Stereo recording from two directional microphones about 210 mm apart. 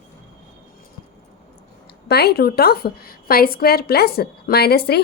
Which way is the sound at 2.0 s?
50° left (ahead or behind).